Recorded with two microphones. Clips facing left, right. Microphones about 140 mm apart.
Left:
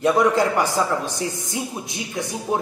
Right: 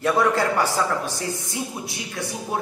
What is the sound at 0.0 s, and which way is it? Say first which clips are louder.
A man's voice: left 3 dB; 15° left (ahead or behind).